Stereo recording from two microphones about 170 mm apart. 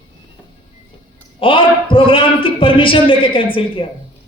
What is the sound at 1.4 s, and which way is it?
A man's voice, 30° left (ahead or behind).